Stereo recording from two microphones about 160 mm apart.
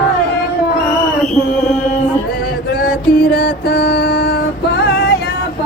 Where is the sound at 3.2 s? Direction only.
70° left (ahead or behind).